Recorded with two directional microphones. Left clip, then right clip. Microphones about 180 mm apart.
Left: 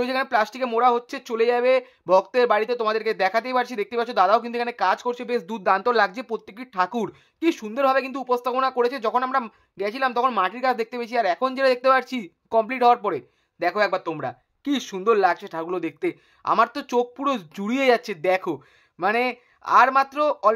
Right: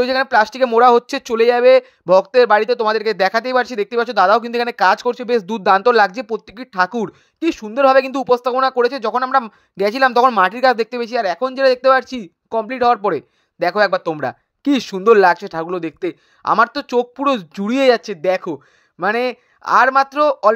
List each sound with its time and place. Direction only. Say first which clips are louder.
0.0 s speech: right 8 dB; 30° right (ahead or behind)
0.7 s speech: right 8 dB; 45° right (ahead or behind); by 7.8 s 20° right (ahead or behind)
7.8 s speech: right 9 dB; 35° right (ahead or behind)
9.8 s speech: right 10 dB; 40° right (ahead or behind); by 20.5 s 25° right (ahead or behind)